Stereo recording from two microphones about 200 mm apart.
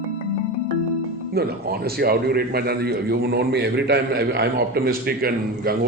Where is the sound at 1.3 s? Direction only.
50° right (ahead or behind).